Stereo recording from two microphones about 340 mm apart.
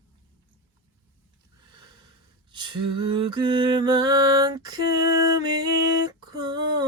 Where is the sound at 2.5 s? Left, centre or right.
Centre.